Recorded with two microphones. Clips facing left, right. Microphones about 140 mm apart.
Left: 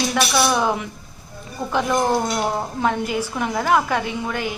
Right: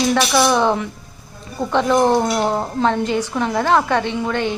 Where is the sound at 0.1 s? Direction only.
5° left (ahead or behind).